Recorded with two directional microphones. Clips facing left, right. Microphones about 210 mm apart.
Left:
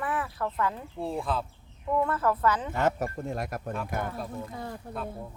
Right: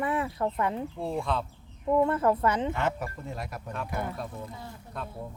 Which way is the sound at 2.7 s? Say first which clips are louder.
Left 3 dB; 45° left (ahead or behind).